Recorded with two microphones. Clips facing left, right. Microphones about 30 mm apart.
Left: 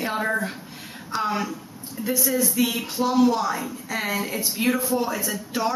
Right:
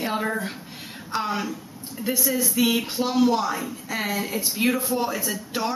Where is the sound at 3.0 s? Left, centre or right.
Right.